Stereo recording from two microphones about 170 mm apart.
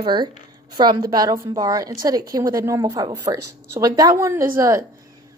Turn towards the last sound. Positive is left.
turn(degrees=-15)  # may be behind; listen again after turning